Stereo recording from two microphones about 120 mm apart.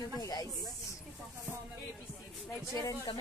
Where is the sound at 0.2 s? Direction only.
30° left (ahead or behind).